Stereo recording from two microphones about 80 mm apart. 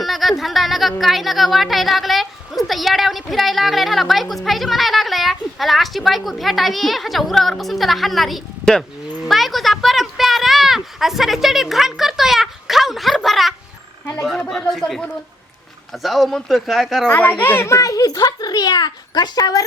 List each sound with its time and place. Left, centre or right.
0.0 s speech: centre
9.2 s a sound: centre
14.5 s speech: centre
16.0 s speech: centre
17.1 s a child's voice: left
17.7 s speech: left